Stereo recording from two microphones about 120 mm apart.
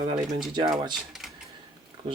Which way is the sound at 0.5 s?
35° right (ahead or behind).